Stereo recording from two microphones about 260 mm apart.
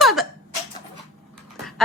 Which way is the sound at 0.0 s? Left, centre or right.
Centre.